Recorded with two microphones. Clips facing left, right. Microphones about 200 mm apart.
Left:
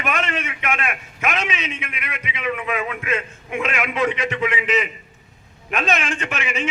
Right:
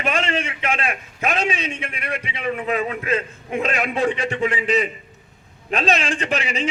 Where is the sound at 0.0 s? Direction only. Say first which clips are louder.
Right 2 dB; 30° right (ahead or behind).